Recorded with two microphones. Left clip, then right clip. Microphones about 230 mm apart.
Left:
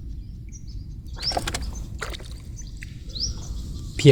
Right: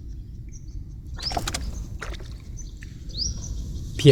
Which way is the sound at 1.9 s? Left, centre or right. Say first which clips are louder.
Left 4 dB; left.